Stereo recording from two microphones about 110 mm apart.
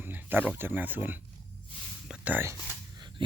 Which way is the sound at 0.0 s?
15° right (ahead or behind).